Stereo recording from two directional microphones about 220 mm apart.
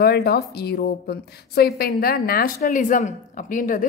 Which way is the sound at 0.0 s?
45° left (ahead or behind).